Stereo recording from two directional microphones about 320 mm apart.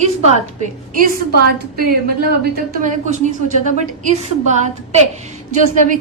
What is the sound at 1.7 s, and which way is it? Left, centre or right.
A woman's voice, right.